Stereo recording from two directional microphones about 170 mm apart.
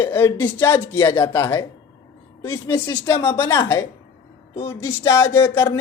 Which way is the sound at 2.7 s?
20° left (ahead or behind).